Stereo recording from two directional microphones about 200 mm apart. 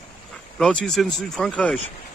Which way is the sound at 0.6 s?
5° left (ahead or behind).